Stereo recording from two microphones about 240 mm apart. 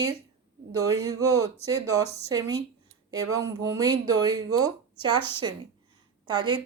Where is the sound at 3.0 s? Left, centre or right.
Centre.